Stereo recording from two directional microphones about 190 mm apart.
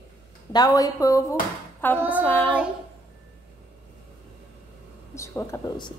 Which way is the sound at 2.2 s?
10° left (ahead or behind).